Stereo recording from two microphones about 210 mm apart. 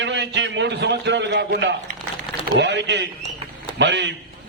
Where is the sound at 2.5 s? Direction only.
55° right (ahead or behind).